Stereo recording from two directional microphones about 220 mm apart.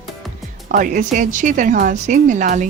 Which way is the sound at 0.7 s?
35° right (ahead or behind).